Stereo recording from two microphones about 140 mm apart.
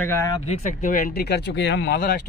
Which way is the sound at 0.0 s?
15° left (ahead or behind).